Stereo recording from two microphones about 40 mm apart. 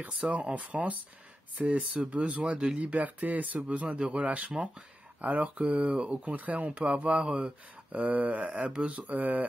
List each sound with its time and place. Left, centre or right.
0.3 s speech: right